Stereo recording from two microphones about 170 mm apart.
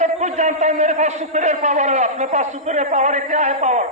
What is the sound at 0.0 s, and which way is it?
A man's voice, 45° right (ahead or behind).